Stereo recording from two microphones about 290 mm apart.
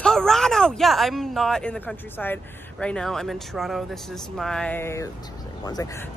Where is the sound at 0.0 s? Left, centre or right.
Centre.